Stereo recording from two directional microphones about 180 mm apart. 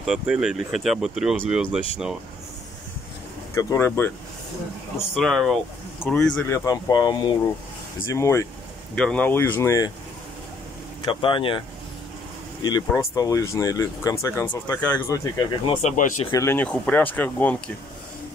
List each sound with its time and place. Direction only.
0.0 s speech: centre (ahead or behind)
3.5 s speech: 15° left (ahead or behind)
5.1 s speech: centre (ahead or behind)
6.3 s speech: 15° left (ahead or behind)
8.9 s speech: 5° left (ahead or behind)
11.1 s speech: 30° left (ahead or behind)
12.6 s speech: 20° left (ahead or behind)
15.1 s speech: 20° left (ahead or behind)